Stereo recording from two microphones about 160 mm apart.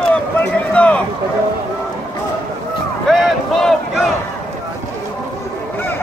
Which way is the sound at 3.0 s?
Centre (ahead or behind).